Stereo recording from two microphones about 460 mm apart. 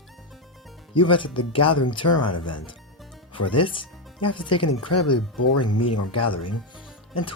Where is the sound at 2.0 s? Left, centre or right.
Left.